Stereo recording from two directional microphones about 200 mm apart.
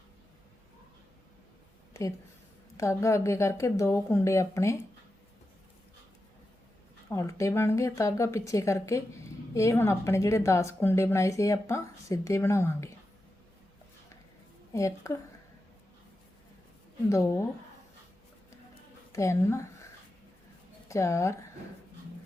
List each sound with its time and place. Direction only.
1.9 s a sound: 15° left (ahead or behind)
2.7 s a woman's voice: 15° left (ahead or behind)
7.1 s a woman's voice: 15° left (ahead or behind)
14.7 s a woman's voice: 15° left (ahead or behind)
17.1 s a woman's voice: 15° left (ahead or behind)
19.1 s a woman's voice: 15° left (ahead or behind)
20.8 s speech: 15° left (ahead or behind)